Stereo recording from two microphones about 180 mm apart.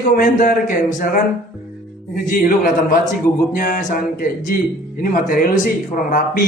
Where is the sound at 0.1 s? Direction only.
50° left (ahead or behind).